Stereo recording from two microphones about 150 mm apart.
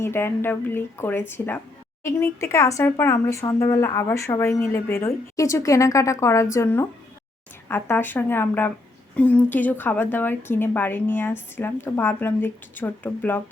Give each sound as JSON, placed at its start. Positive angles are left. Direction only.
{"t": 0.0, "sound": "a woman's voice", "side_deg": 15}